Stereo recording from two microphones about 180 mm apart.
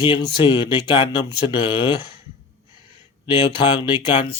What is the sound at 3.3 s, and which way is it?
Speech, 25° left (ahead or behind).